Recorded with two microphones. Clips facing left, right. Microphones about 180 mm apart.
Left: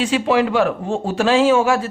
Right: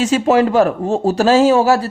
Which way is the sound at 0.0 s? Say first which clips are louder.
Right 4 dB; 45° right (ahead or behind).